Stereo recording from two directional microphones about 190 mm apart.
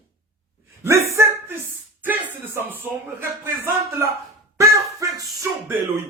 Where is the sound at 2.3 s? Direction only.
10° right (ahead or behind).